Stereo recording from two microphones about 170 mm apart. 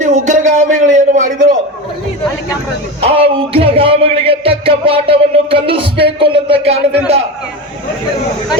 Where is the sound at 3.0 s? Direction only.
35° right (ahead or behind).